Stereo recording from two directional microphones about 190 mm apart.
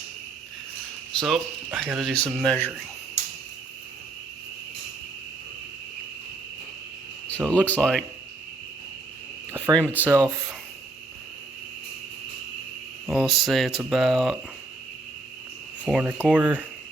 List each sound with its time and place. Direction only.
1.1 s speech: centre (ahead or behind)
7.3 s speech: 5° left (ahead or behind)
9.5 s a sound: 15° right (ahead or behind)
10.0 s speech: 15° right (ahead or behind)
13.1 s speech: centre (ahead or behind)
15.8 s speech: 5° right (ahead or behind)